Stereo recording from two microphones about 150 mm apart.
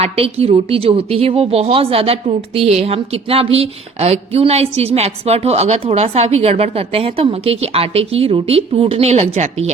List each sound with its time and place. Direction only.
0.0 s speech: 40° right (ahead or behind)